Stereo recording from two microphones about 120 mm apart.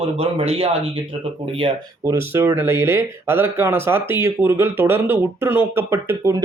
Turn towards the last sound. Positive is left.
turn(degrees=-20)  # may be behind; listen again after turning